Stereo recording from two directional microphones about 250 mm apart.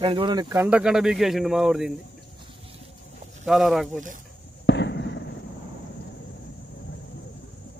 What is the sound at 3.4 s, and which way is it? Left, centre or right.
Speech, centre.